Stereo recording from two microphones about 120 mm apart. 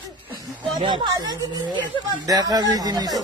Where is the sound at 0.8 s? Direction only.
35° right (ahead or behind).